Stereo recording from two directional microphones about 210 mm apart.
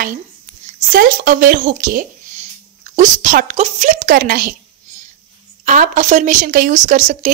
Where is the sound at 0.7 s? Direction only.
40° right (ahead or behind).